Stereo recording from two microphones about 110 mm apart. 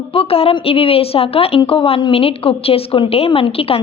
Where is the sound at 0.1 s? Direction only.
60° left (ahead or behind).